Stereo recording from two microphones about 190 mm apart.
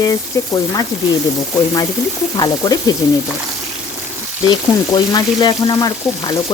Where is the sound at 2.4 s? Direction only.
20° left (ahead or behind).